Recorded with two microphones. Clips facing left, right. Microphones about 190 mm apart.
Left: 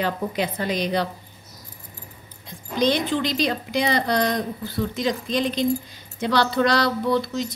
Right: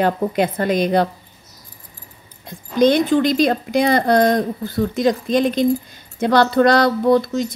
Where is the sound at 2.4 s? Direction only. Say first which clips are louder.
Right 7 dB; 50° right (ahead or behind).